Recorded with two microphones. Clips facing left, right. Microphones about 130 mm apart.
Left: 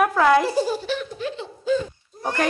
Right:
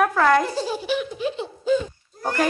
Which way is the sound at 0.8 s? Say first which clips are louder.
Right 3 dB; 10° right (ahead or behind).